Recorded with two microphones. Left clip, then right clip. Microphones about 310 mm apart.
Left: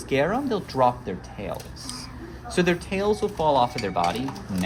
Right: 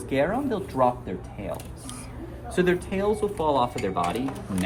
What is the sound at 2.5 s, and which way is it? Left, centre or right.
Speech, left.